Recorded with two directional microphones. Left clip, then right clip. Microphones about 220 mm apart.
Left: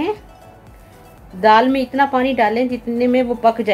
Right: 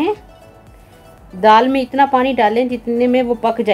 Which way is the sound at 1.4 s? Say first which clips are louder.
Right 2 dB; 40° right (ahead or behind).